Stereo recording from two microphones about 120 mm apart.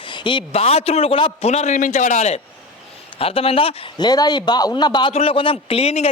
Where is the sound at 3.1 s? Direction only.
55° left (ahead or behind).